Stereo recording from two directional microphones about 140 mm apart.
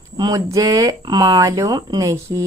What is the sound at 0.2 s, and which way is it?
Speech, 25° right (ahead or behind).